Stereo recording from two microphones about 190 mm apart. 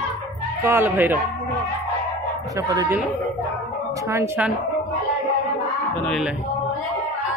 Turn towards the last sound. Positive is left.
turn(degrees=0)  # may be behind; listen again after turning